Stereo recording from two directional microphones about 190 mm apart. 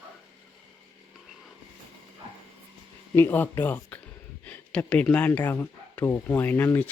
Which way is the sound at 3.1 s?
10° left (ahead or behind).